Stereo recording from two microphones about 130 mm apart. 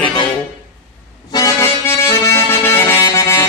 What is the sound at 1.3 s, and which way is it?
Accordion, 25° left (ahead or behind).